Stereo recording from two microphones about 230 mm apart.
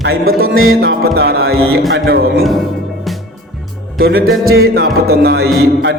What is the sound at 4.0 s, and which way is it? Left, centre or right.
Speech, right.